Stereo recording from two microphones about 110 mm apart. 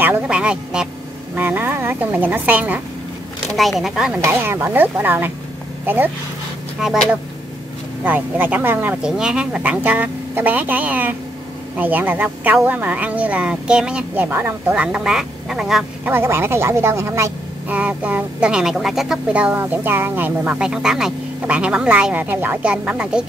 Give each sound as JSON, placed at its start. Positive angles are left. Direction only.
{"t": 0.0, "sound": "speech", "side_deg": -15}
{"t": 3.4, "sound": "speech", "side_deg": 0}
{"t": 4.2, "sound": "speech", "side_deg": -20}
{"t": 6.8, "sound": "speech", "side_deg": -5}
{"t": 8.0, "sound": "speech", "side_deg": -15}
{"t": 9.0, "sound": "speech", "side_deg": -5}
{"t": 16.1, "sound": "speech", "side_deg": -20}
{"t": 17.6, "sound": "speech", "side_deg": -15}